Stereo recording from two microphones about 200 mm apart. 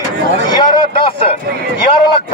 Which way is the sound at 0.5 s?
25° left (ahead or behind).